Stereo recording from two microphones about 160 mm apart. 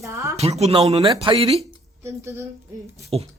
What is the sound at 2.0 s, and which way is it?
Speech, 20° right (ahead or behind).